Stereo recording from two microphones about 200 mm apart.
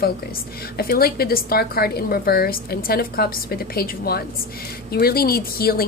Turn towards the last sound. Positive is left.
turn(degrees=50)  # may be behind; listen again after turning